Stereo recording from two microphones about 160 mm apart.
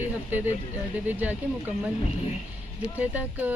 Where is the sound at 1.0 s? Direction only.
10° right (ahead or behind).